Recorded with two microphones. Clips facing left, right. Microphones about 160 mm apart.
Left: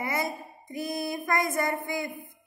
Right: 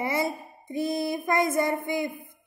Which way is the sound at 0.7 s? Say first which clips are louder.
Right 4 dB; 25° right (ahead or behind).